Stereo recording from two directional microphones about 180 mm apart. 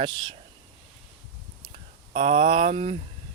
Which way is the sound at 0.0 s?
25° right (ahead or behind).